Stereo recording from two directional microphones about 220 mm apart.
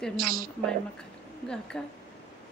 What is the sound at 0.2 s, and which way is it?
Speech, 40° right (ahead or behind).